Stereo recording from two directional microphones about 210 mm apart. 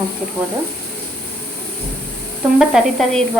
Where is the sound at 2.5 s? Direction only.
Centre (ahead or behind).